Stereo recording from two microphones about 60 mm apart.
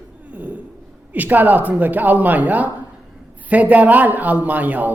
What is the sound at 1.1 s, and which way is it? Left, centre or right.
A man's voice, right.